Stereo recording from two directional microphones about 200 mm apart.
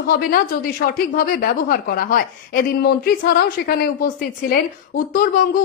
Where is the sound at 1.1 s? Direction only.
45° left (ahead or behind).